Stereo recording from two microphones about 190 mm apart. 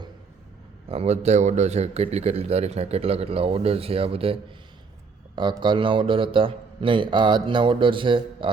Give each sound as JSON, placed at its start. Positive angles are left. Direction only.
{"t": 0.9, "sound": "a man's voice", "side_deg": -35}